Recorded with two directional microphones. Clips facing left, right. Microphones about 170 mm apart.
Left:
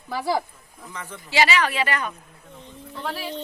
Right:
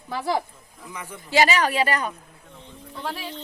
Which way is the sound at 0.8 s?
10° right (ahead or behind).